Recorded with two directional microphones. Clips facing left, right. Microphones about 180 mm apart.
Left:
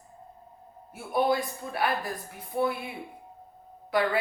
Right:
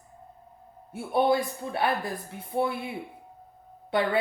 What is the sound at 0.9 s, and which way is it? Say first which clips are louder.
Speech: right 2 dB; 25° right (ahead or behind).